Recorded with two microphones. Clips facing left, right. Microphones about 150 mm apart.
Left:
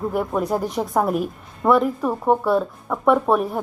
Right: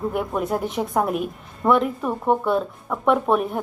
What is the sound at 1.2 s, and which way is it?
Speech, 35° left (ahead or behind).